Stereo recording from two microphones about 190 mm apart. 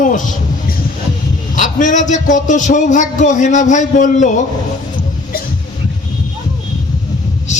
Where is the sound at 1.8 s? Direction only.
40° left (ahead or behind).